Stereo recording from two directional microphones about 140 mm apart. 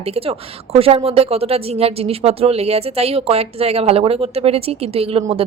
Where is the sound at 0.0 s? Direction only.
45° right (ahead or behind).